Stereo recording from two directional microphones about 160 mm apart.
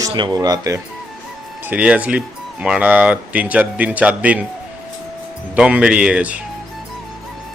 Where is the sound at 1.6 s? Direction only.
10° right (ahead or behind).